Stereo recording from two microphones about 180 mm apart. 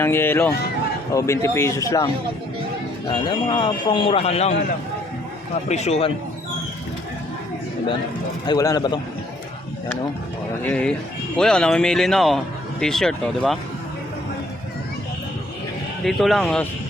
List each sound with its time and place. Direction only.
0.0 s speech: 10° left (ahead or behind)
3.2 s speech: 25° left (ahead or behind)
5.6 s a man's voice: 40° left (ahead or behind)
8.4 s speech: 20° left (ahead or behind)
10.6 s speech: 5° left (ahead or behind)
16.0 s speech: centre (ahead or behind)